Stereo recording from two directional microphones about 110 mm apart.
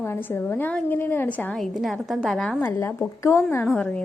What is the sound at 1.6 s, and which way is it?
Speech, centre (ahead or behind).